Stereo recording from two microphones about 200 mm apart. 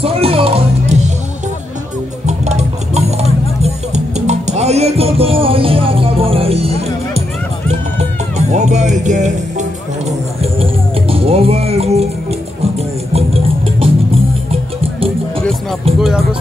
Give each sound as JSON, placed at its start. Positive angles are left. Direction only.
{"t": 0.0, "sound": "music", "side_deg": -30}
{"t": 2.2, "sound": "music", "side_deg": -35}
{"t": 16.0, "sound": "speech", "side_deg": -5}